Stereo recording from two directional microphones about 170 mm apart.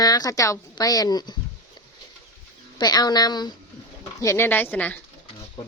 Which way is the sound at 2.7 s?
25° left (ahead or behind).